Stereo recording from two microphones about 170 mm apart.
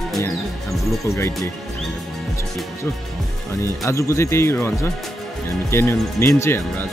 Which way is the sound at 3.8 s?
15° left (ahead or behind).